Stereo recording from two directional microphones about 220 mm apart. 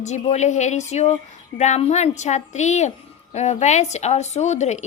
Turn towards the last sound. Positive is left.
turn(degrees=30)  # may be behind; listen again after turning